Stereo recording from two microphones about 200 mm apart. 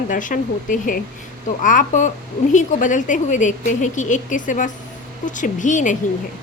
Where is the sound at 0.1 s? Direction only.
40° left (ahead or behind).